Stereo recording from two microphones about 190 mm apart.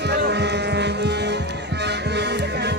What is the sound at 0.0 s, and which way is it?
Music, 60° right (ahead or behind).